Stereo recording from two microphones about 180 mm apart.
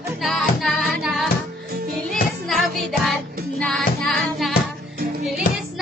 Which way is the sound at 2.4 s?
Centre (ahead or behind).